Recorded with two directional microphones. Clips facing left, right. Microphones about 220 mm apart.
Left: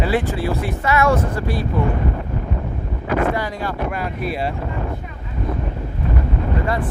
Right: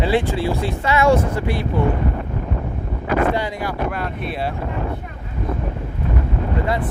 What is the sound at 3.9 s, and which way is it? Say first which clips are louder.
Speech: left 2 dB; centre (ahead or behind).